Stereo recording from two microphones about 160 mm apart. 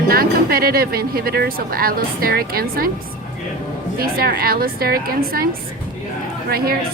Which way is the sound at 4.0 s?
65° right (ahead or behind).